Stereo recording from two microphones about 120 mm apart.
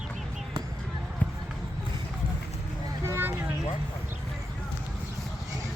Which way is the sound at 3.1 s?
20° right (ahead or behind).